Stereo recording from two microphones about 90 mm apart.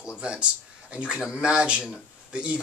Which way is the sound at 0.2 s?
10° right (ahead or behind).